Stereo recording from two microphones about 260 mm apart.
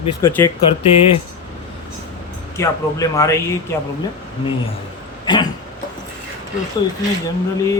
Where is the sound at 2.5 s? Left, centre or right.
Centre.